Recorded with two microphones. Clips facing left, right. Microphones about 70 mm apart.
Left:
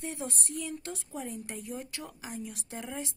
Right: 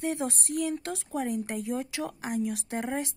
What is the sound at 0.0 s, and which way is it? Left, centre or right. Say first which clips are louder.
Speech: right 7 dB; right.